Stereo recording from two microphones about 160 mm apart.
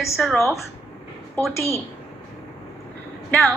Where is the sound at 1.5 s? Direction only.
20° left (ahead or behind).